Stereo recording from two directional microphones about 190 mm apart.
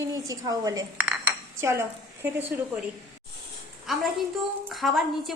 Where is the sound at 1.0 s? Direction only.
5° right (ahead or behind).